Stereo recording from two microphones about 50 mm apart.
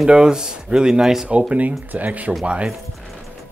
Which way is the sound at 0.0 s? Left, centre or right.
Centre.